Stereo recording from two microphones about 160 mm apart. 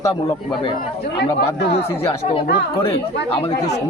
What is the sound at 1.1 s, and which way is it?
Speech, 90° left.